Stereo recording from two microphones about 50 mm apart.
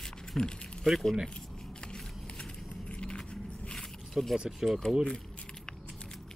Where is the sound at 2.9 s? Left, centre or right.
Left.